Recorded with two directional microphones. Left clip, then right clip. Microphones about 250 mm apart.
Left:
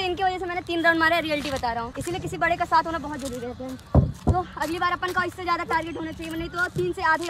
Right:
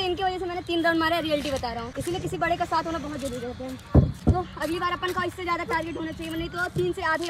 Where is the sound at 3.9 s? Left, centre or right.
Centre.